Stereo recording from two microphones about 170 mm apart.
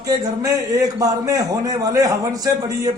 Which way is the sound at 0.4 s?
20° right (ahead or behind).